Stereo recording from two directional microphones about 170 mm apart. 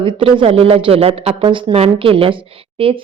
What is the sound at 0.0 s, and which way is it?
Speech, 30° right (ahead or behind).